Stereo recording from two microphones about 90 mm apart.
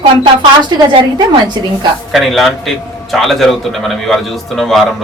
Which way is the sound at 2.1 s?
Centre (ahead or behind).